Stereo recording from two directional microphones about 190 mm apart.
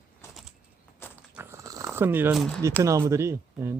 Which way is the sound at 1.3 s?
15° right (ahead or behind).